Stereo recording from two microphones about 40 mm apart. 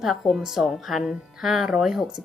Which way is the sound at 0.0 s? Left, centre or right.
Centre.